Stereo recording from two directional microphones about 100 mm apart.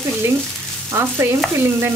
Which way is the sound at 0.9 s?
25° right (ahead or behind).